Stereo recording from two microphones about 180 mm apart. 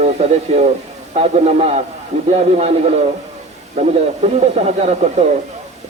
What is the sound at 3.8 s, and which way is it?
Speech, 35° right (ahead or behind).